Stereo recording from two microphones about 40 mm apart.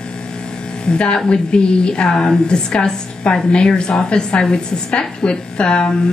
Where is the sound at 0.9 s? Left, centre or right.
Left.